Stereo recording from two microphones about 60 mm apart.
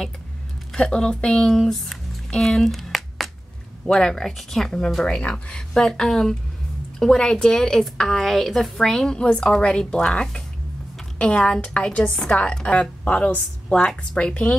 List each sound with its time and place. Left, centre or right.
0.7 s a woman's voice: centre